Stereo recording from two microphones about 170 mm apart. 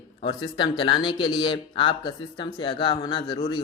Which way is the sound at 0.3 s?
30° left (ahead or behind).